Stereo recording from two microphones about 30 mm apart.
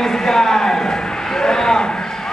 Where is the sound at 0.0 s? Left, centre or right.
Centre.